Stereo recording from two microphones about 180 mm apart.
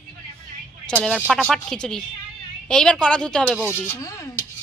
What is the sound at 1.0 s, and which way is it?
Speech, 5° left (ahead or behind).